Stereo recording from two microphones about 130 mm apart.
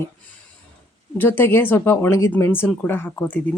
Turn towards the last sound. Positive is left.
turn(degrees=15)  # may be behind; listen again after turning